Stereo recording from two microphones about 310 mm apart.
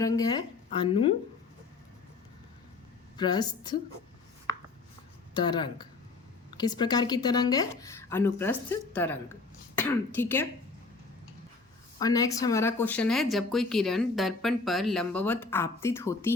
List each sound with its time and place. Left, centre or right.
0.0 s speech: centre
3.2 s speech: centre
5.3 s speech: centre
11.9 s speech: centre